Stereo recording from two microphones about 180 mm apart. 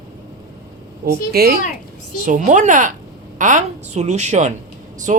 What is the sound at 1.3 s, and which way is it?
Speech, 60° right (ahead or behind).